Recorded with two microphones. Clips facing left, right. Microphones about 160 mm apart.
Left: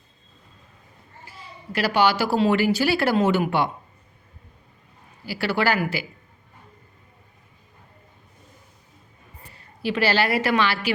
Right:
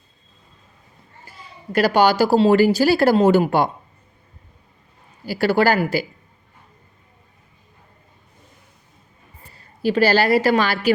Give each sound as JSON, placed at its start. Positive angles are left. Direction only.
{"t": 1.3, "sound": "a woman's voice", "side_deg": -45}
{"t": 5.2, "sound": "a woman's voice", "side_deg": -45}
{"t": 9.5, "sound": "a woman's voice", "side_deg": -35}